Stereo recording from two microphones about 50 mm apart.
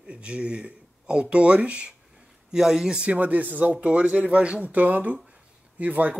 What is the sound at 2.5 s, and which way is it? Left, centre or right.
Speech, centre.